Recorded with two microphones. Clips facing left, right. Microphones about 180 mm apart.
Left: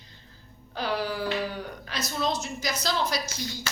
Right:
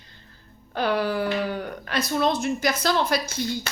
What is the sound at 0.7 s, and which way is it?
Speech, 55° right (ahead or behind).